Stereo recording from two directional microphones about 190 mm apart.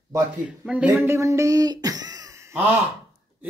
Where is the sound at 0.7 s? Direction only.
5° right (ahead or behind).